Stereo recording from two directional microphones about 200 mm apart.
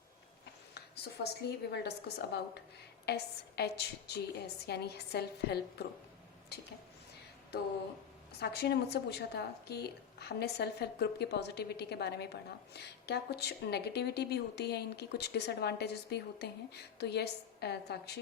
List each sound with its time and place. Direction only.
1.2 s speech: 55° left (ahead or behind)
8.4 s speech: 55° left (ahead or behind)